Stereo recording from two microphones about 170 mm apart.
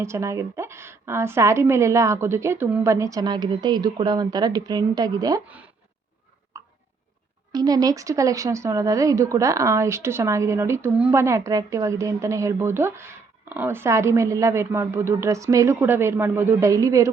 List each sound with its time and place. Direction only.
0.0 s speech: 15° right (ahead or behind)
6.5 s a sound: 15° right (ahead or behind)
7.5 s speech: 20° right (ahead or behind)